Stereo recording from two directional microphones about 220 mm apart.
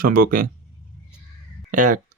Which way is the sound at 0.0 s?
40° right (ahead or behind).